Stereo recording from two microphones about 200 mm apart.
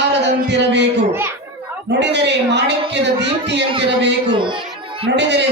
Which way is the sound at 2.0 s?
60° right (ahead or behind).